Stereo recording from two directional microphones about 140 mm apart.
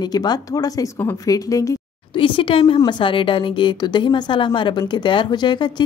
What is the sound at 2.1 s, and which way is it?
A woman's voice, 35° left (ahead or behind).